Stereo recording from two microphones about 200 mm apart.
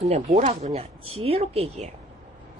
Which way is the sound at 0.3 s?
35° right (ahead or behind).